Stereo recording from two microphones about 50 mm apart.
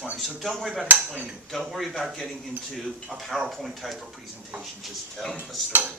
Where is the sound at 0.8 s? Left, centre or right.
Right.